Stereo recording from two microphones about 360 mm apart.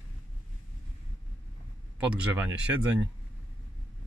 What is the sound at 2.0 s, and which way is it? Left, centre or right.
Speech, centre.